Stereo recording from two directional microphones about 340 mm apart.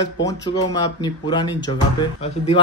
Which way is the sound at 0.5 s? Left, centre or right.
Centre.